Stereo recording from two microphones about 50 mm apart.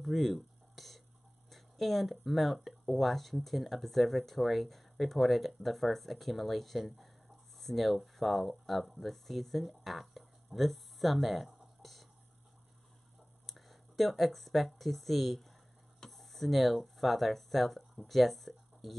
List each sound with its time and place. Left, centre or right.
0.0 s a sound: centre
1.5 s speech: centre
13.5 s speech: centre